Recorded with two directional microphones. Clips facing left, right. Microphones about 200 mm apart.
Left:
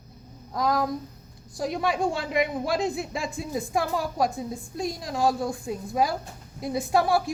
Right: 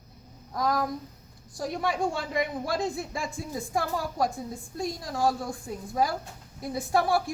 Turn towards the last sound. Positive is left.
turn(degrees=20)  # may be behind; listen again after turning